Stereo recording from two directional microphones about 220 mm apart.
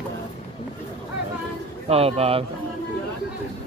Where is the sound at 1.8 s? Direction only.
25° right (ahead or behind).